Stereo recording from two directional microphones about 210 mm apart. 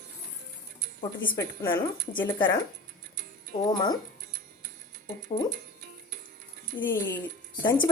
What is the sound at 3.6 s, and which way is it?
Speech, 20° left (ahead or behind).